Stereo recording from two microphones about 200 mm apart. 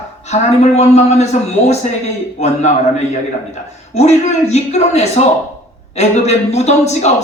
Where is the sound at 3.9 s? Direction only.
35° left (ahead or behind).